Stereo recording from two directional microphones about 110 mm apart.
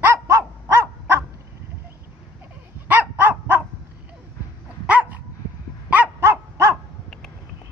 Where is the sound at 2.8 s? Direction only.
15° right (ahead or behind).